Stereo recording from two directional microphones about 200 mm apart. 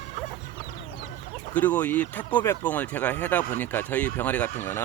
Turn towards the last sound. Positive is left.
turn(degrees=10)  # may be behind; listen again after turning